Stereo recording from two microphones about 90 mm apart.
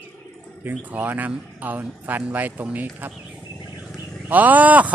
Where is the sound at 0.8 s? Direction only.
20° right (ahead or behind).